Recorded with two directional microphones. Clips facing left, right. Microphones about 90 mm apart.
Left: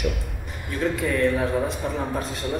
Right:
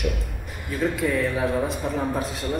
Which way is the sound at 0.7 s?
Centre (ahead or behind).